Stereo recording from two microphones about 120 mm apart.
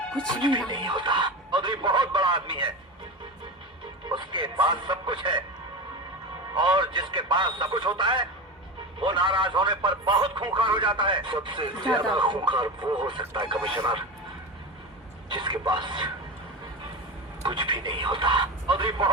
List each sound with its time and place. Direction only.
0.3 s a man's voice: 40° right (ahead or behind)
4.1 s a man's voice: 40° right (ahead or behind)
6.5 s a man's voice: 40° right (ahead or behind)
15.3 s a man's voice: 40° right (ahead or behind)
17.4 s a man's voice: 40° right (ahead or behind)